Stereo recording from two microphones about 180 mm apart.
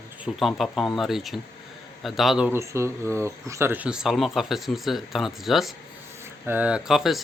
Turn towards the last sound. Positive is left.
turn(degrees=0)  # may be behind; listen again after turning